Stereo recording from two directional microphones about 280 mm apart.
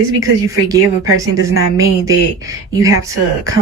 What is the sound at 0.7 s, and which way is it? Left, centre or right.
Speech, centre.